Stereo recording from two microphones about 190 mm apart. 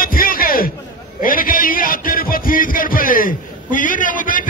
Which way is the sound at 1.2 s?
45° left (ahead or behind).